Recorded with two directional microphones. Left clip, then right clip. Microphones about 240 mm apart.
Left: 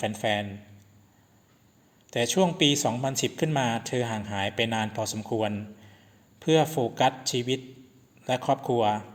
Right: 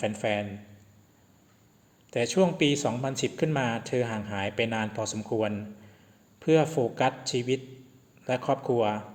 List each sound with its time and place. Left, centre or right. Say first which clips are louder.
0.0 s speech: left 1 dB; left
2.0 s speech: even; left